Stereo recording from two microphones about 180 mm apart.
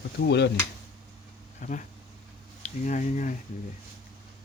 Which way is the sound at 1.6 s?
40° left (ahead or behind).